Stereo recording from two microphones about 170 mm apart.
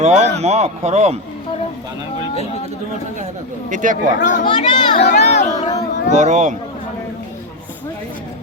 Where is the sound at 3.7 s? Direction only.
50° right (ahead or behind).